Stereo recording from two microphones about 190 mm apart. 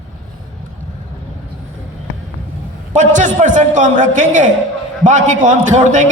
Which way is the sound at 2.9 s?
40° right (ahead or behind).